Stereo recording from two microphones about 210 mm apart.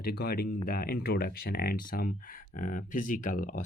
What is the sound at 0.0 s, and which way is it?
Speech, 45° left (ahead or behind).